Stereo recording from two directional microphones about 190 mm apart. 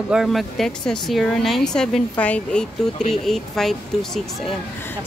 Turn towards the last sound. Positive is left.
turn(degrees=0)  # may be behind; listen again after turning